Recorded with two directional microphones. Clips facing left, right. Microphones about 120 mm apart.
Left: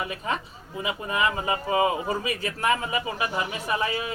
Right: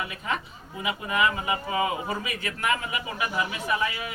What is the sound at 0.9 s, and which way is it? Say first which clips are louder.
Speech: right 1 dB; 30° left (ahead or behind).